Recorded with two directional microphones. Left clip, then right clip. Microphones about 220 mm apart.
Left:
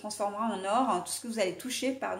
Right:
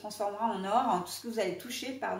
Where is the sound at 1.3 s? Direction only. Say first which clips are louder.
Left 2 dB; 45° left (ahead or behind).